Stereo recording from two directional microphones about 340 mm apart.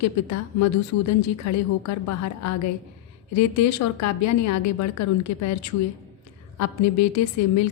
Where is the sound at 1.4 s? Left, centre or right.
Left.